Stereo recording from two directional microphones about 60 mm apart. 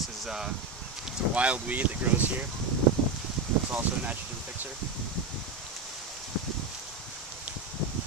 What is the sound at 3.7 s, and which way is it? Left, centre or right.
Speech, right.